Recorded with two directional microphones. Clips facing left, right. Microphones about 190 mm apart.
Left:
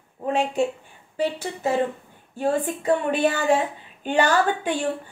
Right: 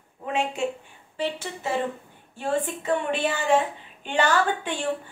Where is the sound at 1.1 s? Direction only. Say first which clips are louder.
Left 4 dB; 40° left (ahead or behind).